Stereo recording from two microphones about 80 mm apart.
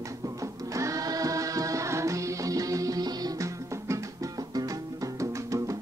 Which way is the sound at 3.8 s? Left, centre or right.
Right.